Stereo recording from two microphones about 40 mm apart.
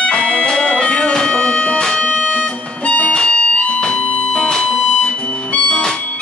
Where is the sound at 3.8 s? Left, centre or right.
Centre.